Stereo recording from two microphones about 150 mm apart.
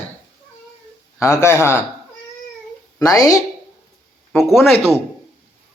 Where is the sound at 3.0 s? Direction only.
25° left (ahead or behind).